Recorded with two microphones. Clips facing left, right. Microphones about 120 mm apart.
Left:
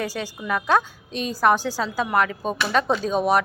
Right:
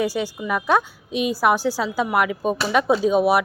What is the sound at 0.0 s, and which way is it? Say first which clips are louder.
Speech: right 5 dB; 15° right (ahead or behind).